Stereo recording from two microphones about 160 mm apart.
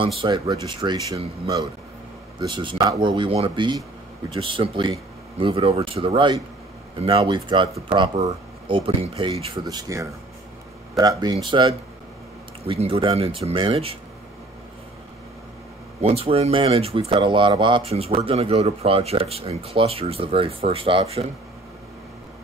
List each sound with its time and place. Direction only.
0.2 s speech: 25° right (ahead or behind)
16.0 s speech: 40° right (ahead or behind)